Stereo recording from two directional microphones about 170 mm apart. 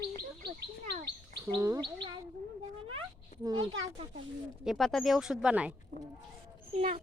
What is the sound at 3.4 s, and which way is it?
Speech, 25° right (ahead or behind).